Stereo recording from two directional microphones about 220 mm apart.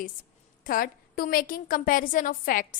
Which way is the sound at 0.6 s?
40° left (ahead or behind).